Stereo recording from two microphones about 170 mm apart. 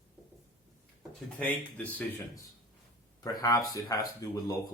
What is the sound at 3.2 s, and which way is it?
Speech, 20° left (ahead or behind).